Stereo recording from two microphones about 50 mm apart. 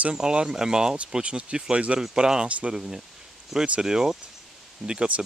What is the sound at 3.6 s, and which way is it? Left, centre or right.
Speech, right.